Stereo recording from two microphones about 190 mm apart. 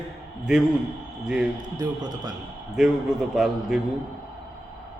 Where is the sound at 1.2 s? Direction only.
5° right (ahead or behind).